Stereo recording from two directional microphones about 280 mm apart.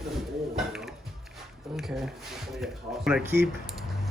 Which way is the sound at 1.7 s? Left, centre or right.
Centre.